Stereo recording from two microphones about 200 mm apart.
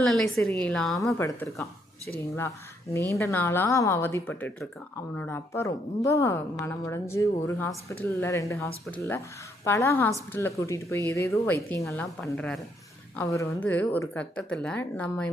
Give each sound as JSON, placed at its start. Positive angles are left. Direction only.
{"t": 0.0, "sound": "a woman's voice", "side_deg": 0}
{"t": 1.2, "sound": "a woman's voice", "side_deg": 10}